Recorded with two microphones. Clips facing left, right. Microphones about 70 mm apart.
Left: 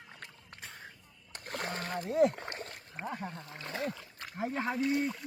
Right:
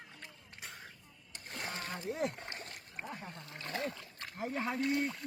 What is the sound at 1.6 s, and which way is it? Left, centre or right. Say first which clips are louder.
Splash: left 3 dB; left.